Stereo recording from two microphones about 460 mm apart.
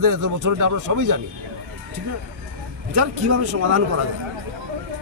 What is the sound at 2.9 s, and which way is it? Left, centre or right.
Speech, right.